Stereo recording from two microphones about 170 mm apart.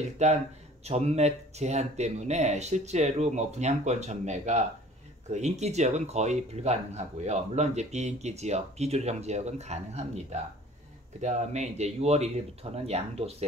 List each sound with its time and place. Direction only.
0.2 s speech: 40° right (ahead or behind)